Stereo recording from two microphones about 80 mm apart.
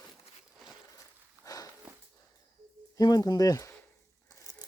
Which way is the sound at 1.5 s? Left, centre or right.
Left.